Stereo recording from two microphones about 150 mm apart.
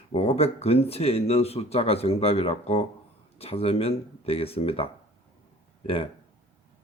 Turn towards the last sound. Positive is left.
turn(degrees=40)  # may be behind; listen again after turning